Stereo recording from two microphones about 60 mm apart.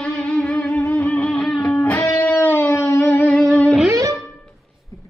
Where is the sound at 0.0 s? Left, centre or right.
Centre; by 3.1 s left.